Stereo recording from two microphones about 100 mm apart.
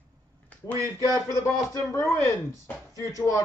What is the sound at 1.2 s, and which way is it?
Speech, 35° left (ahead or behind).